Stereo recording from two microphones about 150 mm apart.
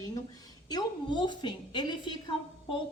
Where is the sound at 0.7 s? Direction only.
30° left (ahead or behind).